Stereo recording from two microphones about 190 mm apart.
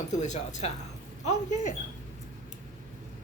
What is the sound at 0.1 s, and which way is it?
Speech, 40° left (ahead or behind).